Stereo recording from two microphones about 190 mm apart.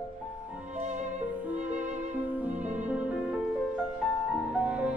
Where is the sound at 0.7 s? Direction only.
40° right (ahead or behind).